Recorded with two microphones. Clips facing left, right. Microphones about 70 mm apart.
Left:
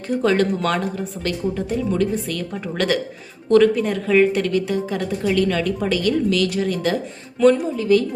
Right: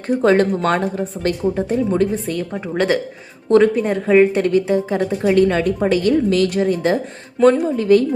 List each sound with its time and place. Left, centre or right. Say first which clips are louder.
0.2 s speech: right 3 dB; right
7.6 s speech: right 4 dB; right